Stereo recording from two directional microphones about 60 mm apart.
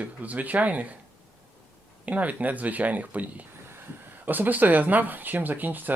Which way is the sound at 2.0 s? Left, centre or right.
Right.